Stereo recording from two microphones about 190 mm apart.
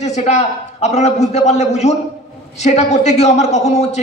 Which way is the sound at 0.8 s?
35° left (ahead or behind).